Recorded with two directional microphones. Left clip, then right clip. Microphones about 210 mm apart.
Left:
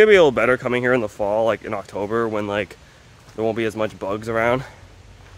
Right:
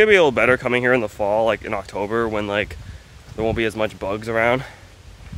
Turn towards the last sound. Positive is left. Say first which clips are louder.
# right 1 dB
turn(degrees=0)  # may be behind; listen again after turning